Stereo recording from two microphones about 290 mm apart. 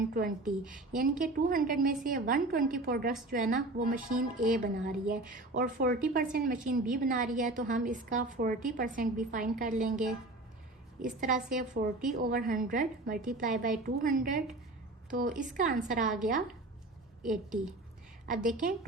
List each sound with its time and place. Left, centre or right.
0.1 s a woman's voice: right
11.2 s a woman's voice: right
17.2 s a woman's voice: centre
18.3 s a woman's voice: right